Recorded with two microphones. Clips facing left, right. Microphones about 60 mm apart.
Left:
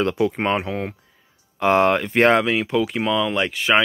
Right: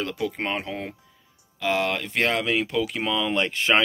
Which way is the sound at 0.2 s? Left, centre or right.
Left.